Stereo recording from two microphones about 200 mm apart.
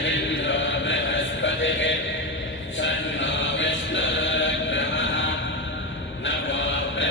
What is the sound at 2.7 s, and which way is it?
Music, 65° left (ahead or behind).